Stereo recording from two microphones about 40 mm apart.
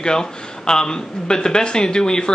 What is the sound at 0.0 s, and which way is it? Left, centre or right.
Speech, centre.